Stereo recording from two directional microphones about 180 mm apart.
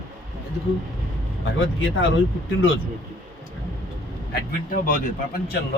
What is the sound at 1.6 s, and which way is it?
Speech, 90° left.